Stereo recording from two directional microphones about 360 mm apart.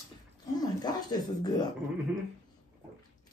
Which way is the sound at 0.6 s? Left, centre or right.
Centre.